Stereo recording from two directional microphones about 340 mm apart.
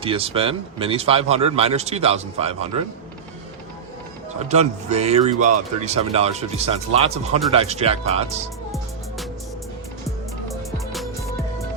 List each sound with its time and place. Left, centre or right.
0.0 s speech: centre
4.4 s a man's voice: centre
10.5 s music: centre